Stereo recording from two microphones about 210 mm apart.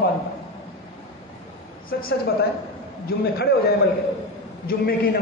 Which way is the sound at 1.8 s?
45° left (ahead or behind).